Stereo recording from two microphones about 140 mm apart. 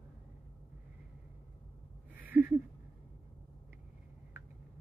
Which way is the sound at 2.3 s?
20° right (ahead or behind).